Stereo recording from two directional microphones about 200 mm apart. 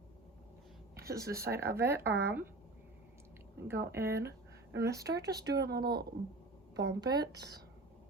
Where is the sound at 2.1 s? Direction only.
55° right (ahead or behind).